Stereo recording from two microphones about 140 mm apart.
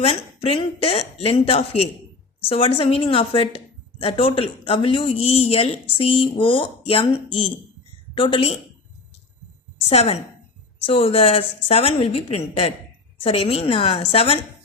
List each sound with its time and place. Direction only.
0.0 s speech: 45° left (ahead or behind)
9.9 s speech: 45° left (ahead or behind)